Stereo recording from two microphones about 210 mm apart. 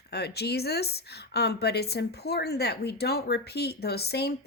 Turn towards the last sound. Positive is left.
turn(degrees=50)  # may be behind; listen again after turning